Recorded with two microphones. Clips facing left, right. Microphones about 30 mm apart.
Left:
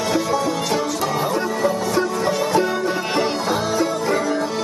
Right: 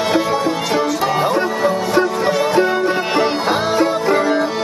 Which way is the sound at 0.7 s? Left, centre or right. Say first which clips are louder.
Right 4 dB; centre.